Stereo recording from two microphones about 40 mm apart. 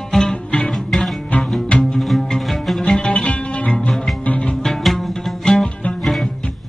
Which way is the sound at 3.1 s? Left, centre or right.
Left.